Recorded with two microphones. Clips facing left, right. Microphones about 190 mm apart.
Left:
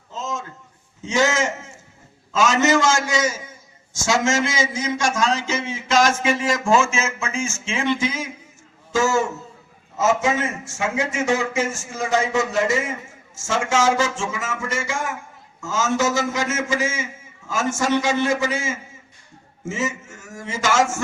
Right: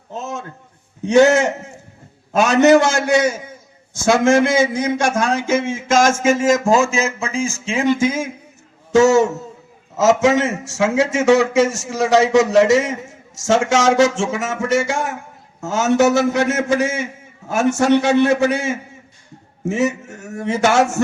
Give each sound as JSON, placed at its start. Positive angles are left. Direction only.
{"t": 0.1, "sound": "a sound", "side_deg": -60}
{"t": 1.0, "sound": "a man's voice", "side_deg": -60}
{"t": 8.9, "sound": "a man's voice", "side_deg": -70}